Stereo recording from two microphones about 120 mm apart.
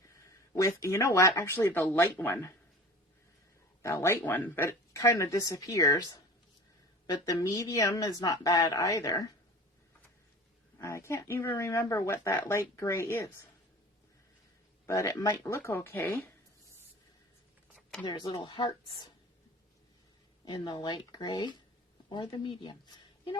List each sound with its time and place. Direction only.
0.1 s a sound: 25° left (ahead or behind)
1.4 s speech: 20° left (ahead or behind)
3.8 s speech: 20° left (ahead or behind)
4.9 s speech: 25° left (ahead or behind)
10.8 s speech: 25° left (ahead or behind)
14.8 s speech: 25° left (ahead or behind)
18.0 s speech: 35° left (ahead or behind)
20.4 s speech: 40° left (ahead or behind)